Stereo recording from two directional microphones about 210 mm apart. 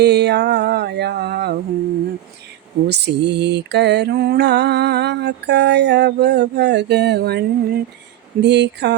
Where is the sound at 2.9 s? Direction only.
55° right (ahead or behind).